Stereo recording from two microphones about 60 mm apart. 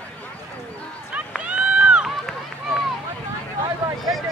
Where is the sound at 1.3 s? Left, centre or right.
Centre.